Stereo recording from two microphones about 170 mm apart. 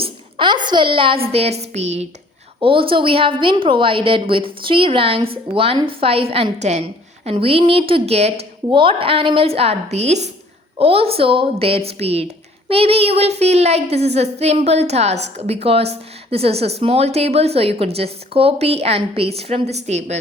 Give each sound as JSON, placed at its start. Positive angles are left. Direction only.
{"t": 0.0, "sound": "a woman's voice", "side_deg": -30}